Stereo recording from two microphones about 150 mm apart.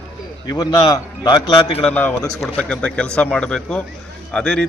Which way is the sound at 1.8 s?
10° left (ahead or behind).